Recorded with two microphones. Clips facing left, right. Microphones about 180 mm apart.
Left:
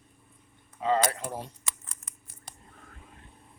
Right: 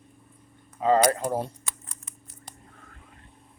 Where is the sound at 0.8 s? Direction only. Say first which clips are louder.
Right 6 dB; 45° right (ahead or behind).